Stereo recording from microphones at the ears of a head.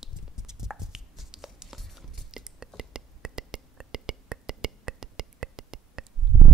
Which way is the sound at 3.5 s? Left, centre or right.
Right.